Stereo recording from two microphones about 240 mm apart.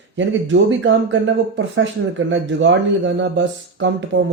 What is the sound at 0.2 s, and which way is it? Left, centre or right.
Speech, right.